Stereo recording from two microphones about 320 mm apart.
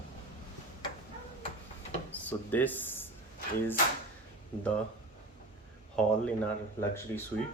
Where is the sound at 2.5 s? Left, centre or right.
Centre.